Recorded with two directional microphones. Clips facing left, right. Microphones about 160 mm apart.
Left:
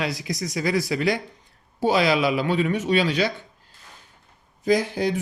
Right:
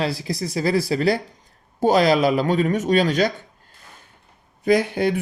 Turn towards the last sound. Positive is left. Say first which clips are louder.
# right 3 dB
turn(degrees=-60)  # may be behind; listen again after turning